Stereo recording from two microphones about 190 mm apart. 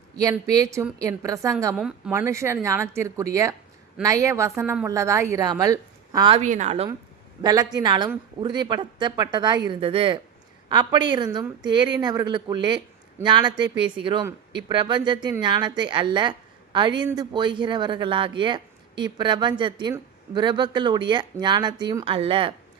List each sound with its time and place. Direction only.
0.2 s a woman's voice: 20° right (ahead or behind)
1.7 s a woman's voice: centre (ahead or behind)
2.1 s a woman's voice: 15° right (ahead or behind)
6.4 s a woman's voice: 40° right (ahead or behind)
7.4 s speech: 20° right (ahead or behind)